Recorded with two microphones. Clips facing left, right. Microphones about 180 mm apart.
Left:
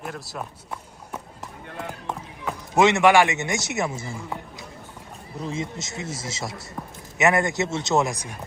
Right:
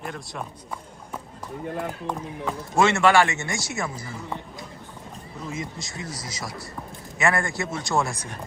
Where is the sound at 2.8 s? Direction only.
20° left (ahead or behind).